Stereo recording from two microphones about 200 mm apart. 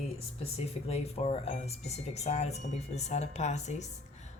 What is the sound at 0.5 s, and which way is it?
Speech, 30° left (ahead or behind).